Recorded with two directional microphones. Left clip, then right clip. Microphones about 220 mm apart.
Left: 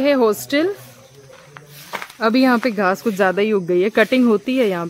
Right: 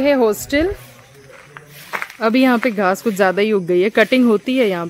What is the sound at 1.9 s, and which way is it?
Speech, 10° right (ahead or behind).